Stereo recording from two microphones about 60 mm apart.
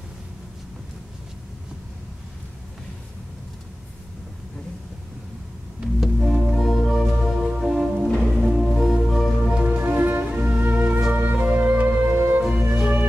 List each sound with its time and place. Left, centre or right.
5.9 s music: centre
9.5 s music: centre
9.8 s music: right